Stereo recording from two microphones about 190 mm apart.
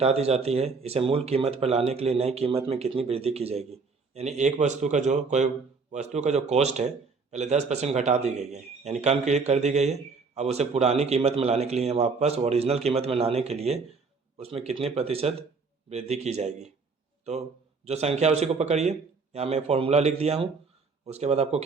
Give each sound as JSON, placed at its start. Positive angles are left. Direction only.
{"t": 0.0, "sound": "a man's voice", "side_deg": -35}
{"t": 17.8, "sound": "a man's voice", "side_deg": -35}